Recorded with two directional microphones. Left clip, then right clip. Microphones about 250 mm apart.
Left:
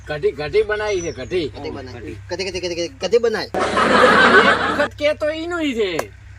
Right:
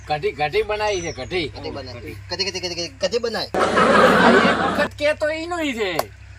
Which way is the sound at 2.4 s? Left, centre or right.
Left.